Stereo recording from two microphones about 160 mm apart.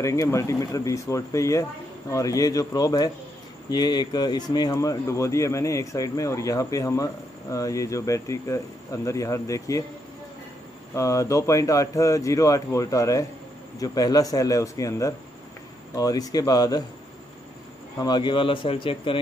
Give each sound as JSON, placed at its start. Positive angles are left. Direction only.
{"t": 0.0, "sound": "speech", "side_deg": 20}
{"t": 11.0, "sound": "speech", "side_deg": 20}
{"t": 17.9, "sound": "speech", "side_deg": 25}